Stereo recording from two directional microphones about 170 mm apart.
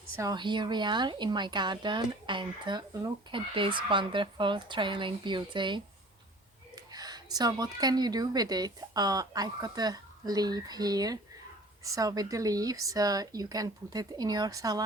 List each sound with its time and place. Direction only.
0.2 s speech: 25° right (ahead or behind)
6.9 s speech: 20° right (ahead or behind)